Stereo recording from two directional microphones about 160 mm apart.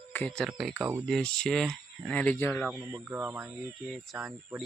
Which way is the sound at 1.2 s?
5° left (ahead or behind).